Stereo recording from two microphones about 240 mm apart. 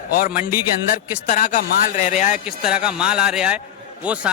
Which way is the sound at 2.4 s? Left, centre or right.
Centre.